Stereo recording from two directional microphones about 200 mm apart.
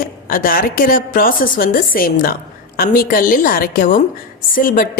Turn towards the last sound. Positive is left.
turn(degrees=45)  # may be behind; listen again after turning